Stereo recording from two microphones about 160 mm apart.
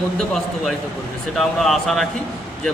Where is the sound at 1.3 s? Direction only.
Centre (ahead or behind).